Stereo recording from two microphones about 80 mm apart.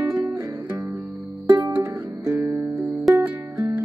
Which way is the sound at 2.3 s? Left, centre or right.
Right.